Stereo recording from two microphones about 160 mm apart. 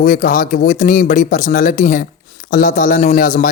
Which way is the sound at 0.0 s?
60° left (ahead or behind).